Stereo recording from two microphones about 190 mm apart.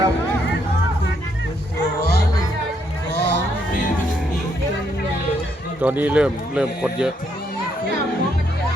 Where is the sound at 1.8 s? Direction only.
55° left (ahead or behind).